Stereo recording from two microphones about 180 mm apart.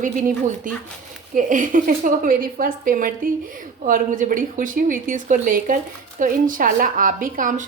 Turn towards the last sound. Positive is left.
turn(degrees=-50)  # may be behind; listen again after turning